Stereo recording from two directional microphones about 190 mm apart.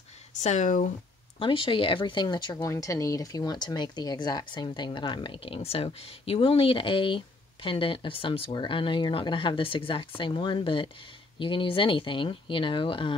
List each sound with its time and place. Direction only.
0.3 s speech: 40° left (ahead or behind)
1.4 s speech: 25° left (ahead or behind)